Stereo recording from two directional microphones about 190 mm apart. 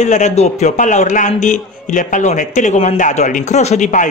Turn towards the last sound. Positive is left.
turn(degrees=40)  # may be behind; listen again after turning